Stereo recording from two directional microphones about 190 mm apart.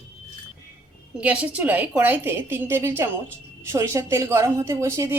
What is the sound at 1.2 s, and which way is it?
A woman's voice, 5° right (ahead or behind).